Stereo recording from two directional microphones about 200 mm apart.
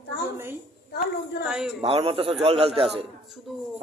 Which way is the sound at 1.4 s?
5° right (ahead or behind).